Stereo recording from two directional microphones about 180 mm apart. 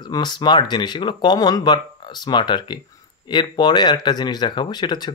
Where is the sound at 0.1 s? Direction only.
25° left (ahead or behind).